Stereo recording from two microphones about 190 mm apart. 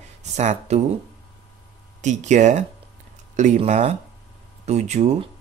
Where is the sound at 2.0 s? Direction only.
40° right (ahead or behind).